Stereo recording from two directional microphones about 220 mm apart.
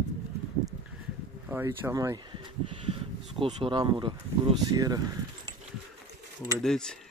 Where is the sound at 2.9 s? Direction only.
30° right (ahead or behind).